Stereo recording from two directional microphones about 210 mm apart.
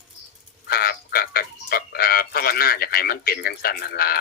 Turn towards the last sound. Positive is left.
turn(degrees=45)  # may be behind; listen again after turning